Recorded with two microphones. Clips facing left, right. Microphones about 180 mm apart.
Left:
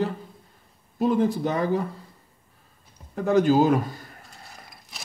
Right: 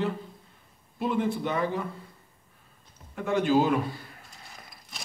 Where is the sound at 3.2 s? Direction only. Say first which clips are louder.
Left 5 dB; 40° left (ahead or behind).